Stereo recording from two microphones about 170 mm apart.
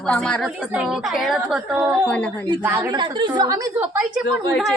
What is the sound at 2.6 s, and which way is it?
Speech, 10° right (ahead or behind).